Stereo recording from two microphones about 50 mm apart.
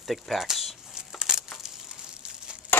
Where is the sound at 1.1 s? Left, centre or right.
Centre.